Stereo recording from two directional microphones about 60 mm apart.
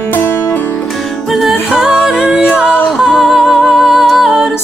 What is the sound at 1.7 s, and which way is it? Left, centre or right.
A capella, centre.